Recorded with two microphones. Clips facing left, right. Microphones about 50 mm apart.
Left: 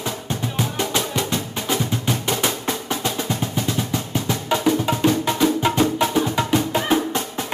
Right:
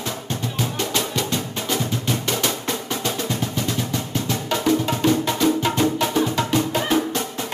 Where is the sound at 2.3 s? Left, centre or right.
Centre.